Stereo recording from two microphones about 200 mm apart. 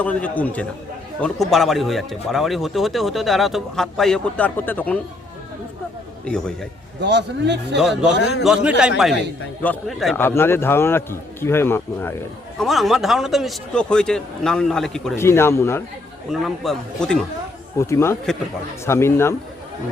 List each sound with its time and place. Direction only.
0.0 s a man's voice: 5° left (ahead or behind)
6.2 s speech: 5° left (ahead or behind)
7.0 s a man's voice: 60° right (ahead or behind)
7.8 s speech: centre (ahead or behind)
10.2 s a man's voice: 10° left (ahead or behind)
12.5 s a man's voice: centre (ahead or behind)
16.3 s speech: centre (ahead or behind)
17.7 s a man's voice: 15° left (ahead or behind)